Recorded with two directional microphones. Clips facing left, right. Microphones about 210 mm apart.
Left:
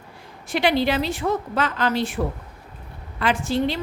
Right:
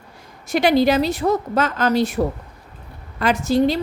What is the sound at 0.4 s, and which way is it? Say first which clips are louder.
A woman's voice: right 5 dB; 40° right (ahead or behind).